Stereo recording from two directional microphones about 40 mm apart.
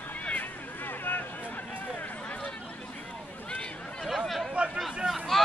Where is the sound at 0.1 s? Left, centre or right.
Left.